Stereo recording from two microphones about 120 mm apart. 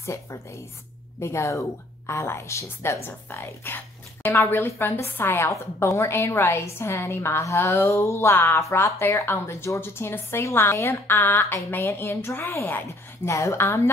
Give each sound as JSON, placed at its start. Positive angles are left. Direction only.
{"t": 0.0, "sound": "speech", "side_deg": 25}